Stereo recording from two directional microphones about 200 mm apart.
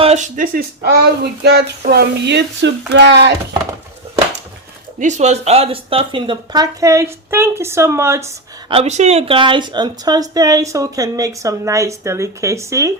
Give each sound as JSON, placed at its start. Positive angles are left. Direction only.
{"t": 0.0, "sound": "speech", "side_deg": -35}
{"t": 4.9, "sound": "speech", "side_deg": -35}
{"t": 8.7, "sound": "speech", "side_deg": -35}